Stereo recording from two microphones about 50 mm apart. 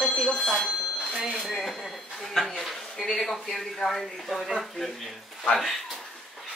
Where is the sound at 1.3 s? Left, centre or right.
Centre.